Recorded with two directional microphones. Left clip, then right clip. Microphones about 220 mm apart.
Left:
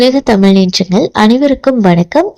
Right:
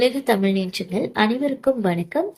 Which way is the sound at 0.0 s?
35° left (ahead or behind).